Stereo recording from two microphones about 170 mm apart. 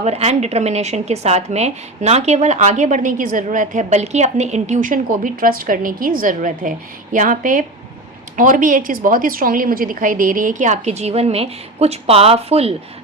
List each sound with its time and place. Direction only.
0.0 s a woman's voice: 40° right (ahead or behind)